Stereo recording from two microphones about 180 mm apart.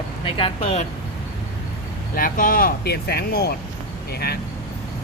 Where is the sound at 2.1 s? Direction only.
50° left (ahead or behind).